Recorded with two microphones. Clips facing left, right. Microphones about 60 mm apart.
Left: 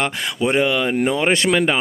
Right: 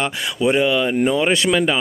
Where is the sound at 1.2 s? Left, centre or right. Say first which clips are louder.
Even; left.